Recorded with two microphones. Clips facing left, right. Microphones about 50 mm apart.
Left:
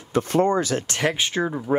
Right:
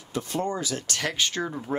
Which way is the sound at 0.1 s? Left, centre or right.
Left.